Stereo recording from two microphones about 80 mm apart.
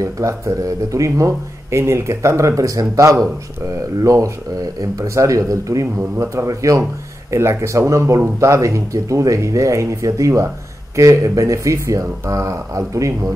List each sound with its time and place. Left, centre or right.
0.0 s a man's voice: right